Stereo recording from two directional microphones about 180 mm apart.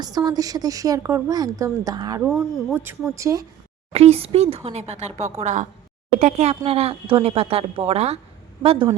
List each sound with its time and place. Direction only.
0.0 s a woman's voice: 20° right (ahead or behind)
2.2 s speech: centre (ahead or behind)
3.2 s speech: 15° right (ahead or behind)
3.9 s a woman's voice: 35° right (ahead or behind)